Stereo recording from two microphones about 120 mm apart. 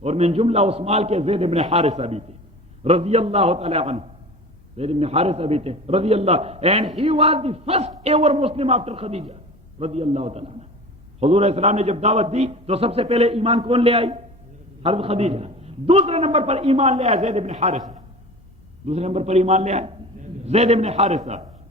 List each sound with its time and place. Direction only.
0.0 s a man's voice: 60° right (ahead or behind); by 18.0 s 85° right
18.9 s a man's voice: 65° right (ahead or behind)